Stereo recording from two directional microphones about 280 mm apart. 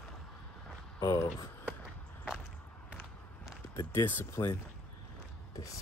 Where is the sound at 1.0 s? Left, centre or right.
Centre.